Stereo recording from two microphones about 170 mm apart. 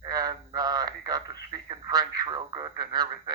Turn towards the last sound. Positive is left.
turn(degrees=-25)  # may be behind; listen again after turning